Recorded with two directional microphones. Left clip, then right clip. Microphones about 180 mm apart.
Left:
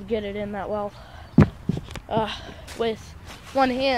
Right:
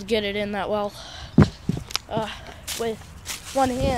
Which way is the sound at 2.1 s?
45° left (ahead or behind).